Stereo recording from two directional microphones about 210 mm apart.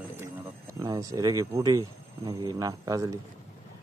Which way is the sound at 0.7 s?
15° right (ahead or behind).